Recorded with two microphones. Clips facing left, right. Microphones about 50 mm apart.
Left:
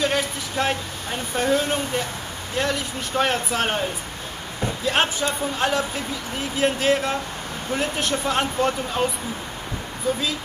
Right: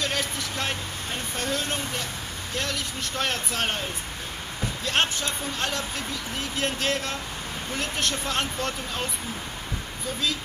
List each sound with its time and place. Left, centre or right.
0.0 s speech: centre
4.8 s speech: centre